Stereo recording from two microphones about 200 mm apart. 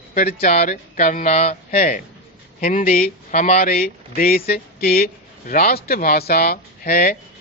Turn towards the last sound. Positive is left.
turn(degrees=50)  # may be behind; listen again after turning